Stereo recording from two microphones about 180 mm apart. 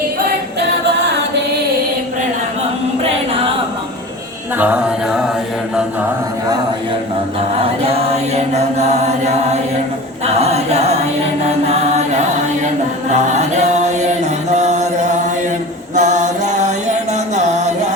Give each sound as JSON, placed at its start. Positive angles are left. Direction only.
{"t": 4.5, "sound": "speech", "side_deg": -10}
{"t": 7.8, "sound": "chant", "side_deg": -35}
{"t": 10.2, "sound": "a capella", "side_deg": -35}
{"t": 11.6, "sound": "chant", "side_deg": -35}
{"t": 14.5, "sound": "music", "side_deg": -40}
{"t": 17.3, "sound": "mantra", "side_deg": -40}